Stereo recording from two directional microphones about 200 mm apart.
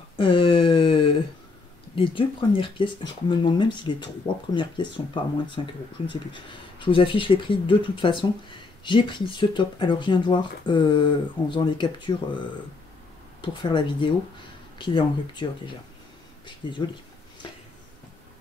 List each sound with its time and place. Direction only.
0.1 s a sound: 25° left (ahead or behind)
2.0 s speech: 25° left (ahead or behind)
13.4 s speech: 25° left (ahead or behind)